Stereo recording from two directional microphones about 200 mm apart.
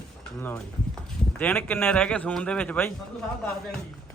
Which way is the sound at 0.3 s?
10° left (ahead or behind).